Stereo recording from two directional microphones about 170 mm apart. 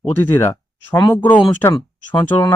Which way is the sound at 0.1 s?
15° left (ahead or behind).